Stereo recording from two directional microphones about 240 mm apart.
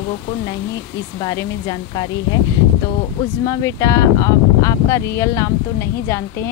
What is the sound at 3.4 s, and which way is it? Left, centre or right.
Speech, centre.